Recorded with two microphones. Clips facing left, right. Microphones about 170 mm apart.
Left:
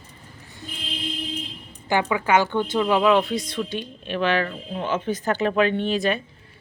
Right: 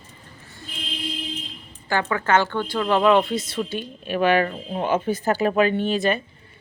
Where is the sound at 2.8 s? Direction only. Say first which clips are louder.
Right 2 dB; 5° left (ahead or behind).